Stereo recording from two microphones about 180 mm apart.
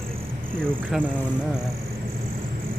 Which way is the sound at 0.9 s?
5° right (ahead or behind).